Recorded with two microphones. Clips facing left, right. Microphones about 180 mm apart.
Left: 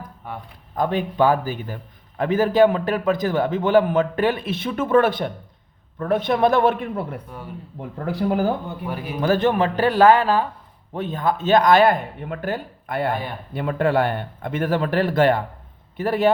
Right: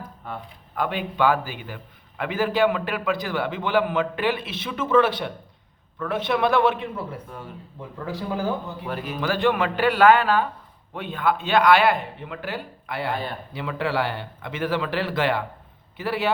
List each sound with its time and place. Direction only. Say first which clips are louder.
0.8 s a man's voice: left 4 dB; 40° left (ahead or behind); by 8.4 s 65° left (ahead or behind)
9.2 s a man's voice: left 4 dB; 45° left (ahead or behind)